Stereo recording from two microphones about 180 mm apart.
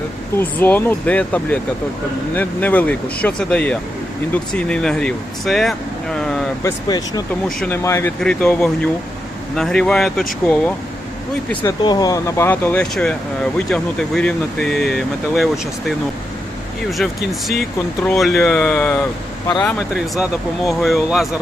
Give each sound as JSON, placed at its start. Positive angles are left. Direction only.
{"t": 0.3, "sound": "speech", "side_deg": 10}
{"t": 6.6, "sound": "speech", "side_deg": 20}
{"t": 11.8, "sound": "speech", "side_deg": 20}
{"t": 18.0, "sound": "speech", "side_deg": 5}
{"t": 19.6, "sound": "speech", "side_deg": -5}